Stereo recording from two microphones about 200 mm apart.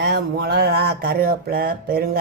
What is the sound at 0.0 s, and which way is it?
Speech, 55° right (ahead or behind).